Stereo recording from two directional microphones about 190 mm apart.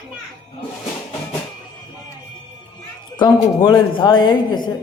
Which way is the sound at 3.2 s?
25° left (ahead or behind).